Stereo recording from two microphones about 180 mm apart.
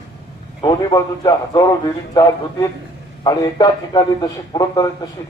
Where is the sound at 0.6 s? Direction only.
20° left (ahead or behind).